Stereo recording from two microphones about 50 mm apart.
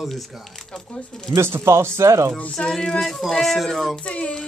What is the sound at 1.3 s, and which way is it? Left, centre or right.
Speech, right.